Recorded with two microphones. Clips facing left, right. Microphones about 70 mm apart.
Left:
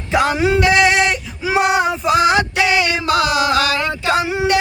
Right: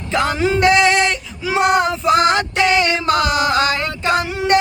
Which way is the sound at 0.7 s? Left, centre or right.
Centre.